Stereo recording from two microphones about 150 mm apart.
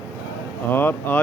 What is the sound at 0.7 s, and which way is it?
Speech, 15° left (ahead or behind).